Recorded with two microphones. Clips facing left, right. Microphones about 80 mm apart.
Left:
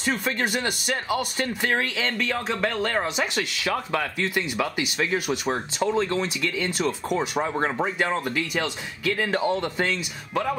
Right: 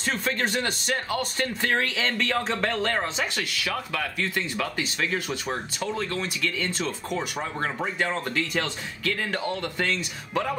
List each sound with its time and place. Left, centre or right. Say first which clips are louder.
0.0 s speech: left 1 dB; centre
3.3 s speech: left 3 dB; left
4.4 s speech: left 4 dB; centre